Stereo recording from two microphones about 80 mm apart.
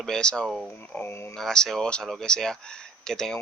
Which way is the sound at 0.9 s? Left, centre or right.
Left.